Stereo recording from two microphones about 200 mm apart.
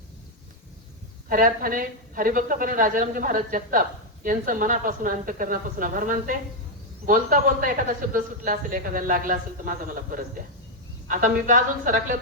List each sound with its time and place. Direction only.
1.3 s a woman's voice: 45° right (ahead or behind)